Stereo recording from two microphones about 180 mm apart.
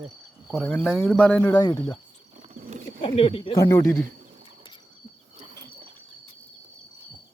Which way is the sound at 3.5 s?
20° left (ahead or behind).